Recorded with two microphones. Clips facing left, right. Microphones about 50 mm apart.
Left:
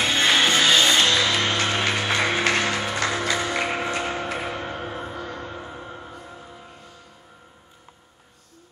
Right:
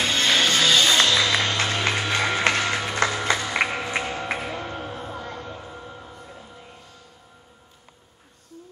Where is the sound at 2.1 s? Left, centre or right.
Centre.